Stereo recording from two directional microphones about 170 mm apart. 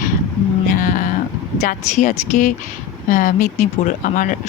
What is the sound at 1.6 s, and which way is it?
Speech, 50° left (ahead or behind).